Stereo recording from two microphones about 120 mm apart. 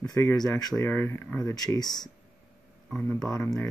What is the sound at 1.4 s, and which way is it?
Speech, 30° left (ahead or behind).